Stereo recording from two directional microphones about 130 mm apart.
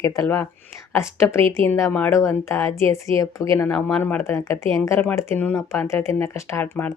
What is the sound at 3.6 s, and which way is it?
Speech, 10° left (ahead or behind).